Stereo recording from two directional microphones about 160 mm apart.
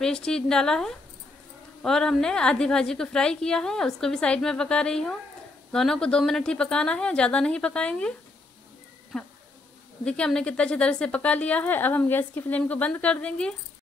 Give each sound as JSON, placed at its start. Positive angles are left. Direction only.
{"t": 0.0, "sound": "a woman's voice", "side_deg": 5}
{"t": 9.1, "sound": "a woman's voice", "side_deg": 5}